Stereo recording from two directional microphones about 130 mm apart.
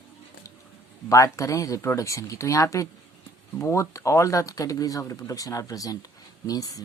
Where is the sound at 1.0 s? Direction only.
25° left (ahead or behind).